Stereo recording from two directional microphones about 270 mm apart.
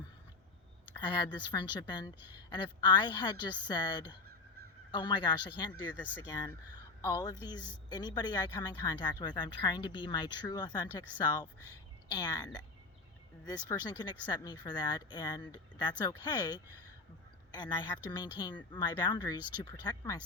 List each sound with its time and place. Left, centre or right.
1.0 s speech: centre